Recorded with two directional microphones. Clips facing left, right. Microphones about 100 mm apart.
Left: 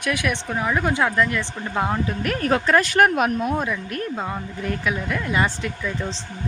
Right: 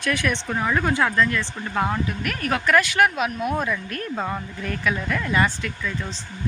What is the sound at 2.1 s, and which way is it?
Speech, 30° left (ahead or behind).